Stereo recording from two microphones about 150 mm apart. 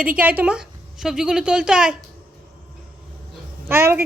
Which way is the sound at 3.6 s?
15° right (ahead or behind).